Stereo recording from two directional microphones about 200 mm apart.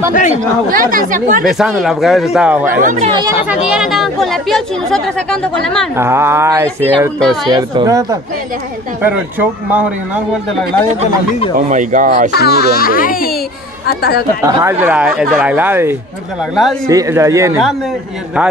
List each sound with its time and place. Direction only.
0.1 s speech: 40° left (ahead or behind)
0.4 s speech: 45° right (ahead or behind)
1.4 s speech: centre (ahead or behind)
2.8 s speech: 40° right (ahead or behind)
3.4 s speech: 5° right (ahead or behind)
5.9 s a man's voice: 10° right (ahead or behind)
11.7 s speech: 40° right (ahead or behind)
12.3 s speech: 50° left (ahead or behind)
14.4 s a man's voice: 15° right (ahead or behind)